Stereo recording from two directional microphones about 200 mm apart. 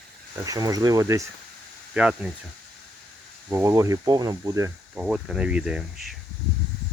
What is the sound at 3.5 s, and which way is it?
Speech, 10° right (ahead or behind).